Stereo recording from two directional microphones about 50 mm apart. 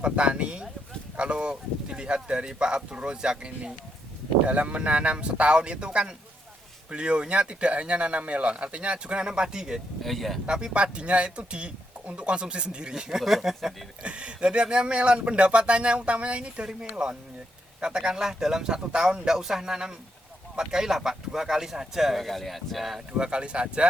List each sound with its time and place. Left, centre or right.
0.0 s speech: right
10.0 s speech: centre
10.4 s speech: centre
14.0 s speech: right; by 23.0 s centre
23.0 s speech: centre